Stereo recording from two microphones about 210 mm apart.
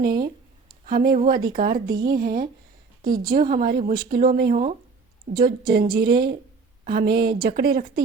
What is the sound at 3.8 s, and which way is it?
Speech, 25° right (ahead or behind).